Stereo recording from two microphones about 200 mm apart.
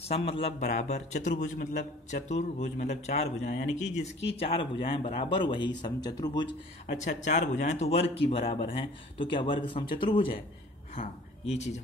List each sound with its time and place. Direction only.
0.1 s a man's voice: 30° left (ahead or behind)
6.9 s speech: 35° left (ahead or behind)